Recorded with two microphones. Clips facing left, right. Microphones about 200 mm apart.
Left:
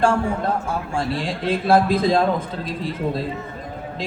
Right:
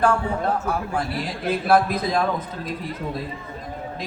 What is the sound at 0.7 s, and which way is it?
A man's voice, 30° left (ahead or behind).